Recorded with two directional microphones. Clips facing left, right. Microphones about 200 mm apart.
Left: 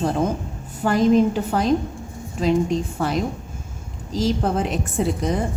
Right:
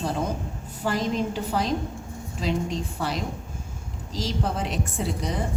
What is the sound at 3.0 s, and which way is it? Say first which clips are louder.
A woman's voice: left 6 dB; 50° left (ahead or behind).